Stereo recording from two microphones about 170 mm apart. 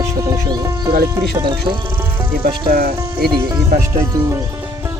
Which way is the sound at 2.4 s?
65° right (ahead or behind).